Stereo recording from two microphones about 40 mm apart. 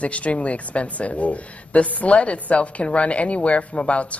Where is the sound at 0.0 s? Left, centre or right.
Left.